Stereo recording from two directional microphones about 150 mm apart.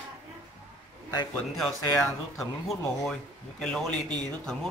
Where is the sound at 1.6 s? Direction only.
Centre (ahead or behind).